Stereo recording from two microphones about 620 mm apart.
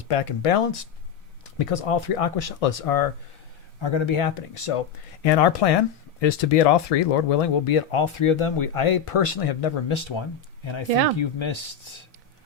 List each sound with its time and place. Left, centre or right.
0.0 s speech: left
3.8 s speech: left
5.2 s speech: left